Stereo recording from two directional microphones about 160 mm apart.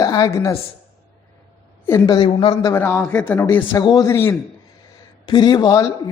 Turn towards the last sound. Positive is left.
turn(degrees=20)  # may be behind; listen again after turning